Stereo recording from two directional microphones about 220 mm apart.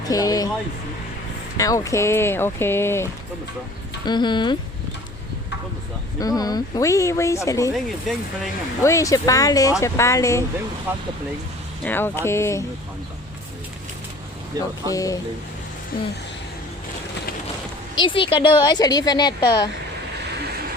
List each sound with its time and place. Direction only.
0.1 s speech: 15° left (ahead or behind)
1.5 s a woman's voice: 15° left (ahead or behind)
6.1 s speech: 15° left (ahead or behind)
7.7 s speech: centre (ahead or behind)
8.8 s speech: 15° left (ahead or behind)
10.9 s speech: 10° right (ahead or behind)
11.9 s speech: 10° left (ahead or behind)
14.8 s speech: 15° left (ahead or behind)
17.9 s a woman's voice: 20° left (ahead or behind)